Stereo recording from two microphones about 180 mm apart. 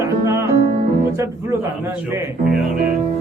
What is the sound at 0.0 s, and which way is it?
Music, 15° right (ahead or behind).